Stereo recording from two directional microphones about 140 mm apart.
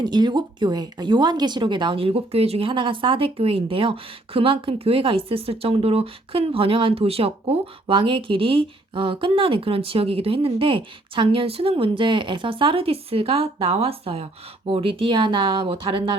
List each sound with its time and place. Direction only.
0.0 s speech: 30° right (ahead or behind)